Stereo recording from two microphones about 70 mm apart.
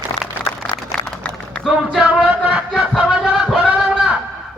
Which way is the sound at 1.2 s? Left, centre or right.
Left.